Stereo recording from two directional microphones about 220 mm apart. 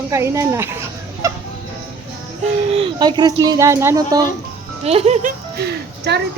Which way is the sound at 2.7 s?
20° right (ahead or behind).